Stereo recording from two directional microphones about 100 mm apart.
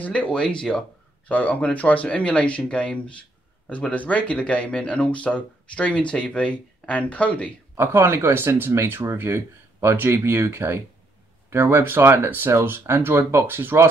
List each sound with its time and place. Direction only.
0.0 s speech: 15° left (ahead or behind)
7.7 s speech: 25° right (ahead or behind)